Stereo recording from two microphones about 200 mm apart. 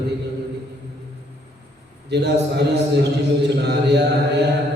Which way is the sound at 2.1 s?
55° right (ahead or behind).